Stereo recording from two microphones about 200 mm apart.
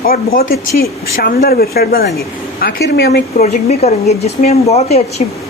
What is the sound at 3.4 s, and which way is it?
Speech, 35° left (ahead or behind).